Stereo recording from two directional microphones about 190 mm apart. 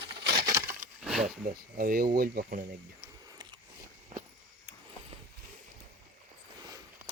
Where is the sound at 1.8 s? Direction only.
50° right (ahead or behind).